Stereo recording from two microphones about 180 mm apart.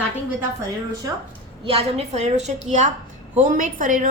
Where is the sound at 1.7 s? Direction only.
35° right (ahead or behind).